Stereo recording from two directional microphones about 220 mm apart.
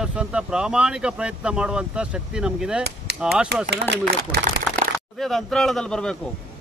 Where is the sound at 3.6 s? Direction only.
50° right (ahead or behind).